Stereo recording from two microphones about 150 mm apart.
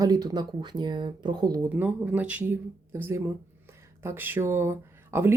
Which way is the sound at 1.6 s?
15° right (ahead or behind).